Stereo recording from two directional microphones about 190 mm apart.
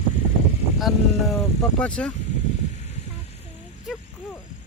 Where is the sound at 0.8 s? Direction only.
Centre (ahead or behind).